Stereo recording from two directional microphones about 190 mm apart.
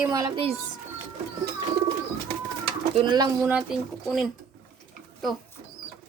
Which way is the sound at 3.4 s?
5° right (ahead or behind).